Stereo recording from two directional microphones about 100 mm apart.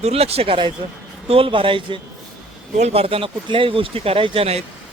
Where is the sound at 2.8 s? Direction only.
75° right (ahead or behind).